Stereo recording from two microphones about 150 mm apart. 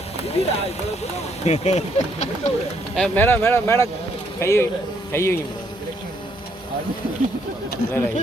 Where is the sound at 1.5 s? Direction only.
50° left (ahead or behind).